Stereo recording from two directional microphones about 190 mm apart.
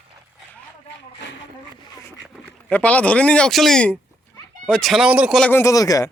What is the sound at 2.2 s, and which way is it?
Speech, 5° left (ahead or behind).